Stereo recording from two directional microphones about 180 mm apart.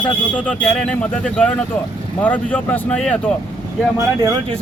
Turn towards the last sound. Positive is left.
turn(degrees=-25)  # may be behind; listen again after turning